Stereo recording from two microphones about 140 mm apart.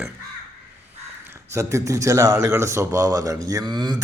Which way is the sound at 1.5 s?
20° right (ahead or behind).